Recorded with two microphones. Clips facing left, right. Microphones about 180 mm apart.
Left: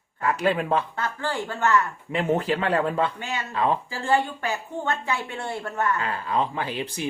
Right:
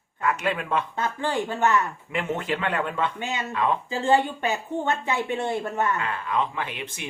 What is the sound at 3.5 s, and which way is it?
Speech, 35° left (ahead or behind).